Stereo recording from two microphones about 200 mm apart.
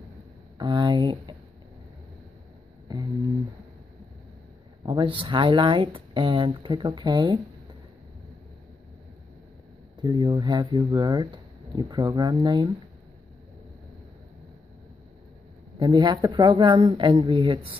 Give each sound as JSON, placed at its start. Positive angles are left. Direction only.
{"t": 0.6, "sound": "speech", "side_deg": -20}
{"t": 2.9, "sound": "a sound", "side_deg": -15}
{"t": 4.8, "sound": "speech", "side_deg": -25}
{"t": 9.9, "sound": "speech", "side_deg": -20}
{"t": 15.8, "sound": "speech", "side_deg": -20}